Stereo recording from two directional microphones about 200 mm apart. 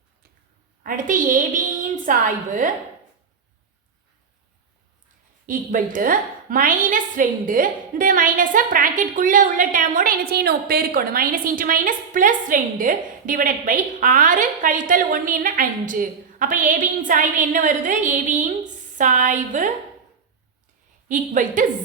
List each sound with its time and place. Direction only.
0.9 s a woman's voice: 40° right (ahead or behind)
5.5 s a woman's voice: 45° right (ahead or behind)
21.1 s a woman's voice: 40° right (ahead or behind)